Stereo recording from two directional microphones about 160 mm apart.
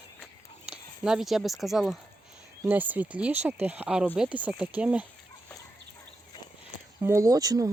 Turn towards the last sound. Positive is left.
turn(degrees=-20)  # may be behind; listen again after turning